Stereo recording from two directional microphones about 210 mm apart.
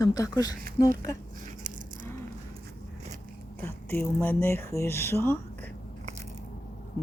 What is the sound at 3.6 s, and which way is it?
Speech, 10° left (ahead or behind).